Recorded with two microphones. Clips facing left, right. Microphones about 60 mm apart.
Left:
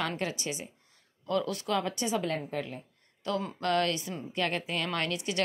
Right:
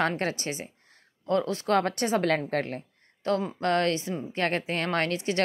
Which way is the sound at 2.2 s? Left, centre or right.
Right.